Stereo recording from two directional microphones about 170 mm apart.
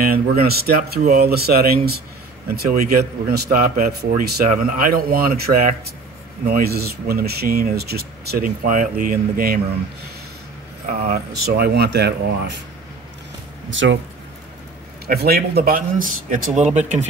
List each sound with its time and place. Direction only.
0.0 s a man's voice: 65° right (ahead or behind)
6.4 s a man's voice: 65° right (ahead or behind)
11.1 s speech: 65° right (ahead or behind); by 12.5 s 80° right
13.7 s speech: 90° right
15.0 s a man's voice: 65° right (ahead or behind); by 17.0 s 45° right (ahead or behind)